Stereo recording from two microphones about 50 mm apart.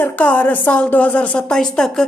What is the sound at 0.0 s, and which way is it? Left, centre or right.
A woman's voice, left.